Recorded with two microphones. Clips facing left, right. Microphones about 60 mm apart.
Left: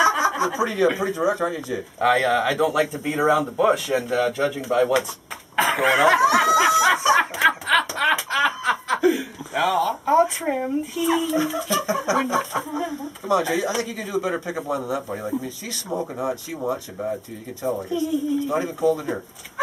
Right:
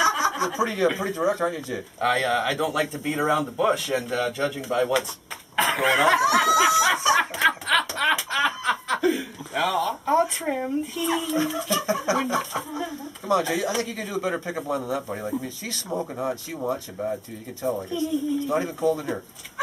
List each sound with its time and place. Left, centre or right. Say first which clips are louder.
0.0 s chuckle: left 3 dB; centre
0.8 s speech: left 3 dB; centre
12.8 s speech: left 3 dB; centre
14.5 s speech: left 2 dB; centre